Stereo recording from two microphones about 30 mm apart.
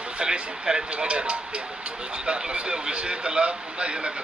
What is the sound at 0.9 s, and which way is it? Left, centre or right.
Speech, right.